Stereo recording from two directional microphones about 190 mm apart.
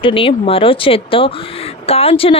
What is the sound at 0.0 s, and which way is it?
A man's voice, 30° left (ahead or behind).